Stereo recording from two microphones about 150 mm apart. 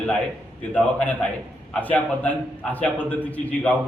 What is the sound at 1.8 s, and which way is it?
A man's voice, 10° left (ahead or behind).